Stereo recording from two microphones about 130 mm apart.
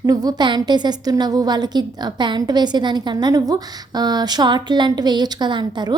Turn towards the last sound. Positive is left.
turn(degrees=-35)  # may be behind; listen again after turning